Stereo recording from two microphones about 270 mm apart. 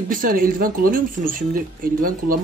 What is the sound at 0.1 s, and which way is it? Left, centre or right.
Speech, right.